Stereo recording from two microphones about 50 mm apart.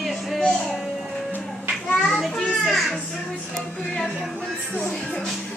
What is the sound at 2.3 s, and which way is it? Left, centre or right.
Music, centre.